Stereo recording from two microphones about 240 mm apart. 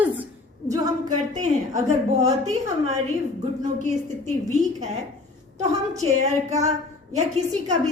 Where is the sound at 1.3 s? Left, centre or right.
Right.